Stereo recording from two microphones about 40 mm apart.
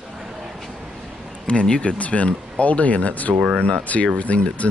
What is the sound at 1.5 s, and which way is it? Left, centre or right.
Speech, left.